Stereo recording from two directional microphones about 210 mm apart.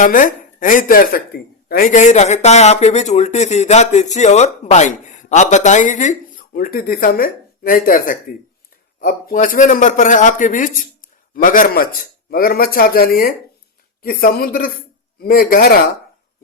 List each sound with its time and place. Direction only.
0.0 s speech: 40° left (ahead or behind)